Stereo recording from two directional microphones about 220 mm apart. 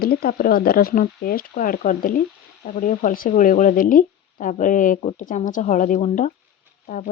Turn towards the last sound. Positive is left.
turn(degrees=35)  # may be behind; listen again after turning